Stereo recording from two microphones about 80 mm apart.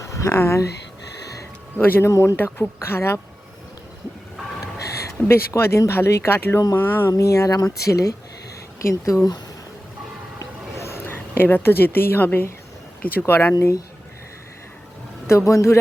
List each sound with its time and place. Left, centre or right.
0.0 s a sound: left
0.3 s speech: left
1.2 s a sound: left
1.8 s speech: left
4.8 s a sound: left
5.9 s speech: left
7.1 s speech: left
10.8 s a woman's voice: left
15.3 s speech: left